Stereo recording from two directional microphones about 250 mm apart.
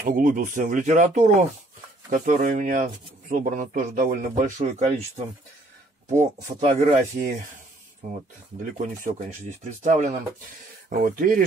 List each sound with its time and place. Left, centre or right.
0.0 s speech: right
8.7 s speech: right